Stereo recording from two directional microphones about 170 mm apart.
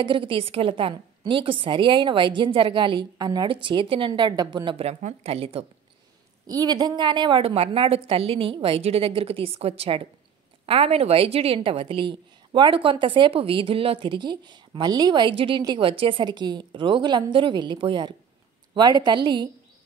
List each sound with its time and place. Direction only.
0.0 s a woman's voice: 30° right (ahead or behind)
6.4 s a woman's voice: 20° right (ahead or behind)